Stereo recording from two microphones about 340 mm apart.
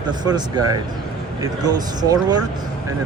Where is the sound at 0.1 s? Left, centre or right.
Centre.